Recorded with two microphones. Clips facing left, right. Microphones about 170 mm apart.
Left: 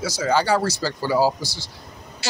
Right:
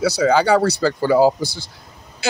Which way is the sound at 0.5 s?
55° right (ahead or behind).